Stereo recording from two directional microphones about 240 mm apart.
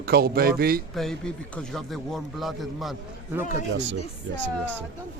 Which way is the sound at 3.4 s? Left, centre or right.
Left.